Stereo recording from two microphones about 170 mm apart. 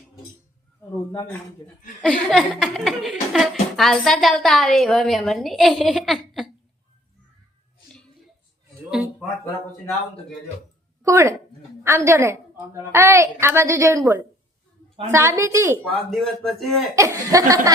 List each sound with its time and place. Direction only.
2.0 s speech: 5° left (ahead or behind)
11.0 s a woman's voice: 15° right (ahead or behind)
15.8 s speech: centre (ahead or behind)
16.9 s a woman's voice: 20° right (ahead or behind)